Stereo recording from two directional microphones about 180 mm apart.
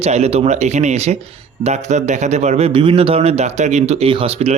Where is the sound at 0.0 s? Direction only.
35° right (ahead or behind).